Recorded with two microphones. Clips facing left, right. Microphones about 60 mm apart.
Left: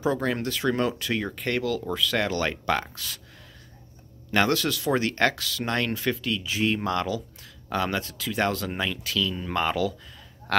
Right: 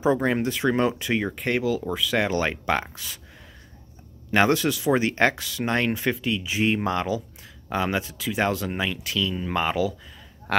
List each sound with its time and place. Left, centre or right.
0.0 s speech: right
4.3 s speech: centre